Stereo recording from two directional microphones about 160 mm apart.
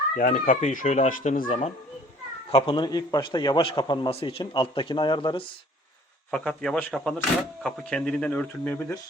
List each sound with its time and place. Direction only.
0.2 s speech: 60° left (ahead or behind)
1.5 s a man's voice: 40° left (ahead or behind)
6.3 s speech: 5° left (ahead or behind)